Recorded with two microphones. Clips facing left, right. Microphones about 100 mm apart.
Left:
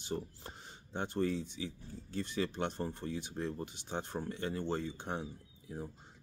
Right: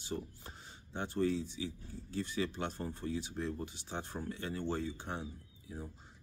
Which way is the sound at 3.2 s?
20° left (ahead or behind).